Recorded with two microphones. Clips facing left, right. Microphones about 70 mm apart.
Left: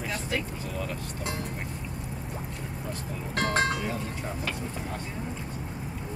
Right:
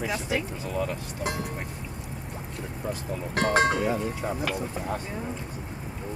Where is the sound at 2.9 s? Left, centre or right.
Centre.